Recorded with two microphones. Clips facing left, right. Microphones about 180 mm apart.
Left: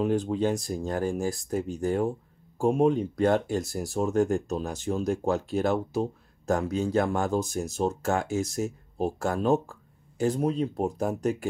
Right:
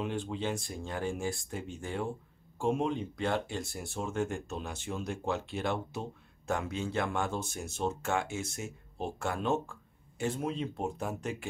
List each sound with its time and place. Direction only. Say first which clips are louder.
0.0 s speech: left 9 dB; 40° left (ahead or behind)